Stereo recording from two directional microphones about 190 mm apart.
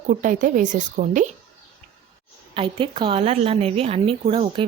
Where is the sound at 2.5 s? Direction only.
30° right (ahead or behind).